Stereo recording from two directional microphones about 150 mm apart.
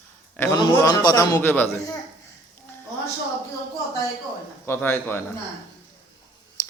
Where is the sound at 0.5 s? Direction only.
25° left (ahead or behind).